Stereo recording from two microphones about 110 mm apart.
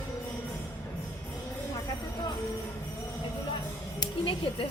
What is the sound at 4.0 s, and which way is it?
Music, 50° left (ahead or behind).